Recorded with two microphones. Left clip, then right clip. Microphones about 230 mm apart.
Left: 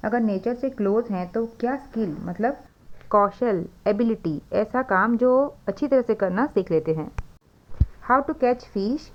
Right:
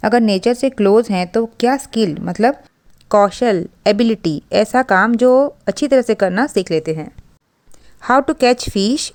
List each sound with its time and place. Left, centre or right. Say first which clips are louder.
0.0 s speech: right 10 dB; right
3.1 s speech: right 7 dB; right
8.0 s speech: right 8 dB; right